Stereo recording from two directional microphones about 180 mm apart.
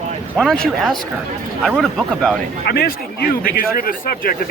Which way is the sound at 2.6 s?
60° left (ahead or behind).